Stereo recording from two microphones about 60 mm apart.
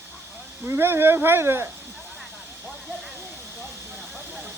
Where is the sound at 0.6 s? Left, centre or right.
Right.